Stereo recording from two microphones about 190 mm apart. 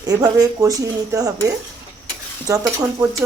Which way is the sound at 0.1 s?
20° right (ahead or behind).